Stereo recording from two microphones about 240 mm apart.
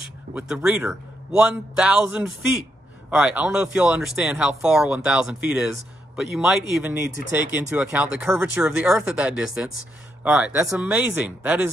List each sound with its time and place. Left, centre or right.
0.3 s speech: centre